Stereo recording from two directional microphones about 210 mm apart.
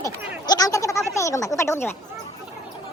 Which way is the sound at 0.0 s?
20° left (ahead or behind).